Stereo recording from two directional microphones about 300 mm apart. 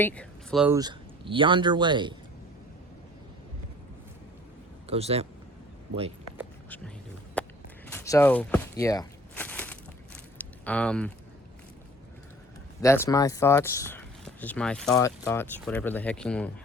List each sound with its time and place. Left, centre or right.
0.0 s speech: centre
0.8 s speech: centre
4.9 s speech: centre
7.4 s walk: centre
7.9 s a sound: centre
12.8 s speech: centre